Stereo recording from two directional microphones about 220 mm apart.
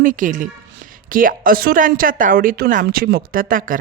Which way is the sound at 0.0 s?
35° right (ahead or behind).